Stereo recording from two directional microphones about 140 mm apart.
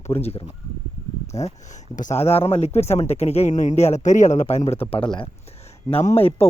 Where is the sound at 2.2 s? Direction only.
45° left (ahead or behind).